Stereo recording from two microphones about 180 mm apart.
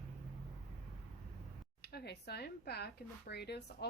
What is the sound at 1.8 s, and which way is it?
A woman's voice, 65° left (ahead or behind).